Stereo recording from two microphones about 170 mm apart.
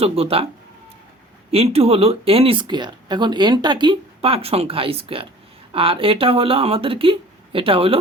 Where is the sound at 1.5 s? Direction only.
35° right (ahead or behind).